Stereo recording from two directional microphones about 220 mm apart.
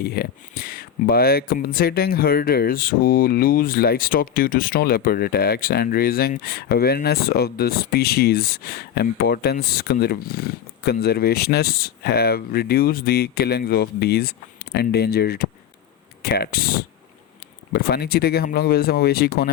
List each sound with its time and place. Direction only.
0.0 s speech: 45° left (ahead or behind)